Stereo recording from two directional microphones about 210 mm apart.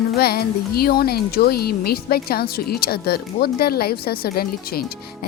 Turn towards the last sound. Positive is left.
turn(degrees=45)  # may be behind; listen again after turning